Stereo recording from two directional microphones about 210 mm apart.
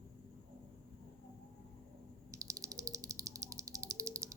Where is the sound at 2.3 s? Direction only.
15° right (ahead or behind).